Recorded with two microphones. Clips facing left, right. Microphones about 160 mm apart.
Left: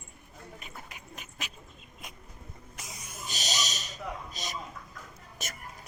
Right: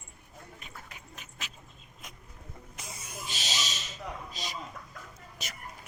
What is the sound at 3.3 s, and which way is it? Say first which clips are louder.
Owl: left 2 dB; 40° left (ahead or behind).